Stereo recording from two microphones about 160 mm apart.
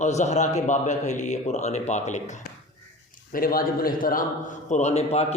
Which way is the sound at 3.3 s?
65° left (ahead or behind).